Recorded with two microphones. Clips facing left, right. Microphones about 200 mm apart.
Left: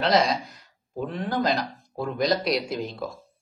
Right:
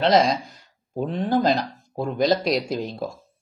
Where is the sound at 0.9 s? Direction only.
30° right (ahead or behind).